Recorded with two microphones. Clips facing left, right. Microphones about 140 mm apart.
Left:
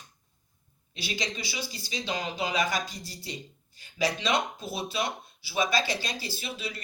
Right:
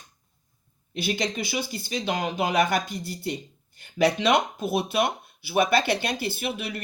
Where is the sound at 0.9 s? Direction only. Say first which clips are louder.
Right 7 dB; 55° right (ahead or behind).